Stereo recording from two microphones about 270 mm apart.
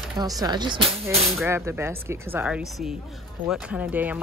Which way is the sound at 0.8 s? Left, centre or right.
Centre.